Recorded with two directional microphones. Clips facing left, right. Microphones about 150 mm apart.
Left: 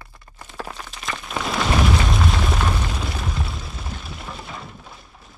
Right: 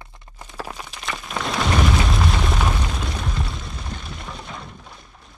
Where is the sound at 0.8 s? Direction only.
Centre (ahead or behind).